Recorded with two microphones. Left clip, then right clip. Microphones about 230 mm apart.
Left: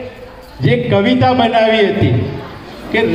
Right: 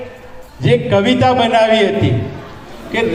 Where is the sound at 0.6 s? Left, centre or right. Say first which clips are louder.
Right 1 dB; right.